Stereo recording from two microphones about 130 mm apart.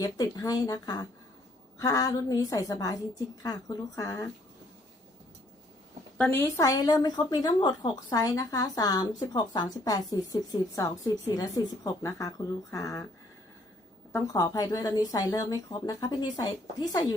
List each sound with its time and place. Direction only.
0.0 s a woman's voice: 30° left (ahead or behind)
6.1 s a woman's voice: 10° left (ahead or behind)
6.4 s a woman's voice: 25° left (ahead or behind)
14.3 s a woman's voice: 30° left (ahead or behind)